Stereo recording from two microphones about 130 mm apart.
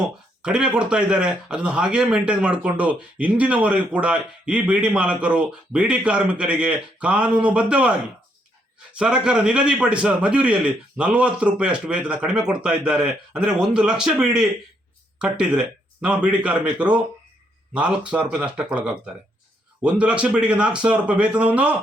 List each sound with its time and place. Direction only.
0.0 s speech: 5° right (ahead or behind)
9.0 s speech: 5° right (ahead or behind)